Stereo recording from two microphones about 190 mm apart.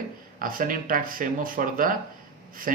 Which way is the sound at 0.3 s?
45° right (ahead or behind).